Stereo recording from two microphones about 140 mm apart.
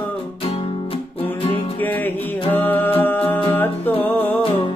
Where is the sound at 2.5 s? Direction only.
15° left (ahead or behind).